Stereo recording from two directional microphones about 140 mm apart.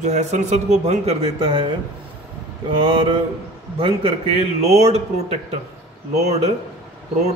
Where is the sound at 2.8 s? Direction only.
40° right (ahead or behind).